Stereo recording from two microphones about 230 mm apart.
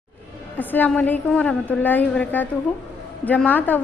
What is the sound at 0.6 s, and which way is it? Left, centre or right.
A woman's voice, centre.